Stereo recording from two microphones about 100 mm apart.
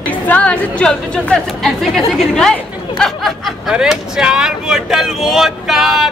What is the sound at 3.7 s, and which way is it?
Speech, 5° right (ahead or behind).